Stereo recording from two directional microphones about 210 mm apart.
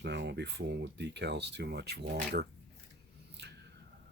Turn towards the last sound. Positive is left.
turn(degrees=-55)  # may be behind; listen again after turning